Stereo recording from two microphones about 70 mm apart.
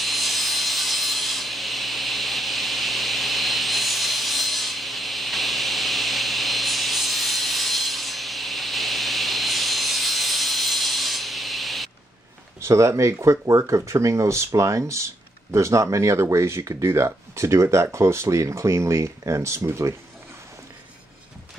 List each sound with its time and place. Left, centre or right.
0.0 s sawing: centre
12.5 s speech: right